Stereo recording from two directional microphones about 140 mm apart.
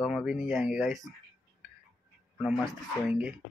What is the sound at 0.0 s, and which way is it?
Speech, 5° right (ahead or behind).